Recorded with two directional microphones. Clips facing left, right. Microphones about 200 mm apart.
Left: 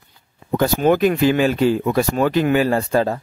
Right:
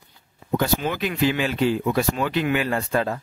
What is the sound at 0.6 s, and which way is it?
Speech, 45° left (ahead or behind).